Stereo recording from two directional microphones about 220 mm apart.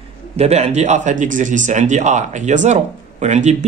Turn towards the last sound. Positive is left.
turn(degrees=-30)  # may be behind; listen again after turning